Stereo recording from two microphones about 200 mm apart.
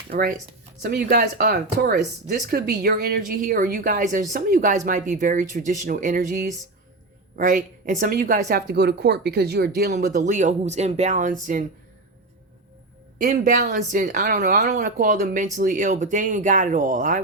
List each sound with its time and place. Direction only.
0.1 s a woman's voice: 50° right (ahead or behind)
10.0 s speech: 40° right (ahead or behind)
13.1 s speech: 40° right (ahead or behind)